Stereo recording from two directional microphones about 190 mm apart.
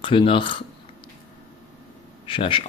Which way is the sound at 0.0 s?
25° left (ahead or behind).